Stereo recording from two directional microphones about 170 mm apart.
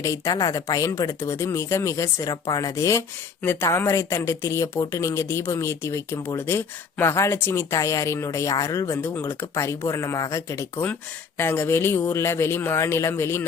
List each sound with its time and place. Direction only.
0.0 s speech: 20° left (ahead or behind)